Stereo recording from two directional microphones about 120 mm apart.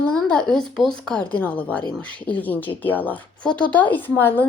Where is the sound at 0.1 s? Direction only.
5° left (ahead or behind).